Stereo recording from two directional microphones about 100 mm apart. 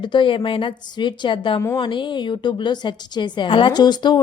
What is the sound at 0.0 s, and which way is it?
A woman's voice, 55° left (ahead or behind).